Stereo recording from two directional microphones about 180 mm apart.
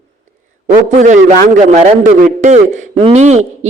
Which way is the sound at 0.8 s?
45° right (ahead or behind).